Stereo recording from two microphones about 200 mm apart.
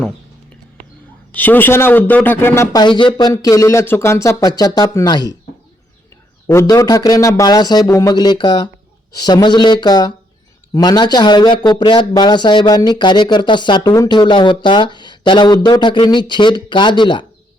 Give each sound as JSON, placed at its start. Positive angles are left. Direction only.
{"t": 1.3, "sound": "a man's voice", "side_deg": 10}
{"t": 6.5, "sound": "a man's voice", "side_deg": 15}